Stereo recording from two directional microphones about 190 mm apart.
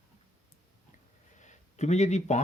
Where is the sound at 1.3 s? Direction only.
40° left (ahead or behind).